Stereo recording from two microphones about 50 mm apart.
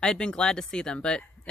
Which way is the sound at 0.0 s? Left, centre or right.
Centre.